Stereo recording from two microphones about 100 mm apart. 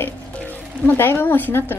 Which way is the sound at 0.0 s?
20° left (ahead or behind).